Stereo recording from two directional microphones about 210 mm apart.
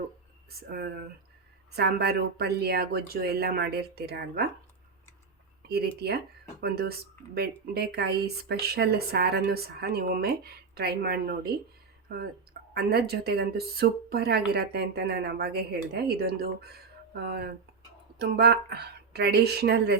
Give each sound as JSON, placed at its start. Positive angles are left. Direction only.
{"t": 1.7, "sound": "speech", "side_deg": -50}
{"t": 5.6, "sound": "speech", "side_deg": -50}